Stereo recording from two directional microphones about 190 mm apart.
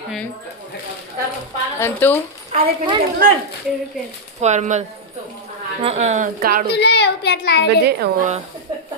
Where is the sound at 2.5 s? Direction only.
40° right (ahead or behind).